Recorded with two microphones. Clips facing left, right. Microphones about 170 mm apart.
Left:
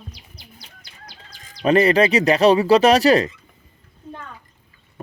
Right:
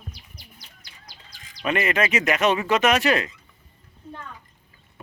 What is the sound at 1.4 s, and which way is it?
Speech, 35° left (ahead or behind).